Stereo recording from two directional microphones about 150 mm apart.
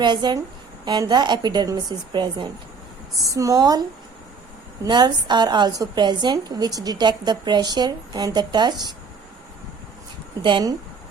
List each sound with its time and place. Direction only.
0.0 s a woman's voice: 30° right (ahead or behind)
10.4 s a woman's voice: 30° right (ahead or behind)